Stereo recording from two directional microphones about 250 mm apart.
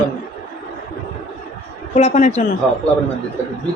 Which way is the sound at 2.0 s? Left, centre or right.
Left.